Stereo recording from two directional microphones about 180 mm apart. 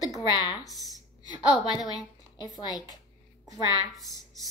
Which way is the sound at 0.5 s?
Centre (ahead or behind).